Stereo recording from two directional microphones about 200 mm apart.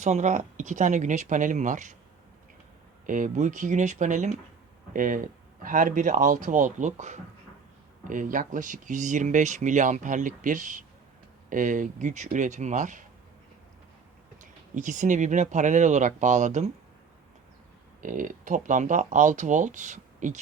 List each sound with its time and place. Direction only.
0.0 s speech: 35° right (ahead or behind)
3.1 s speech: 40° right (ahead or behind)
14.4 s speech: 40° right (ahead or behind)
18.0 s speech: 40° right (ahead or behind)